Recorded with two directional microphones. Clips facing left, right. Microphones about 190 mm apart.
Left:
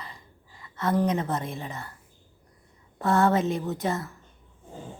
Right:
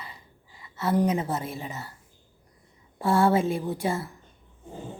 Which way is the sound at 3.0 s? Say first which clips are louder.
Right 1 dB; 10° right (ahead or behind).